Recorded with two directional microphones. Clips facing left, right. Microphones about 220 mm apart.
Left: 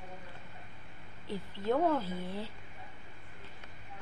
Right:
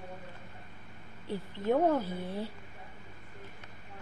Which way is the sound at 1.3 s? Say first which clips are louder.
Right 2 dB; 15° right (ahead or behind).